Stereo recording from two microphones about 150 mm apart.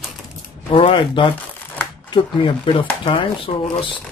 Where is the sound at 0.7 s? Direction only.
35° left (ahead or behind).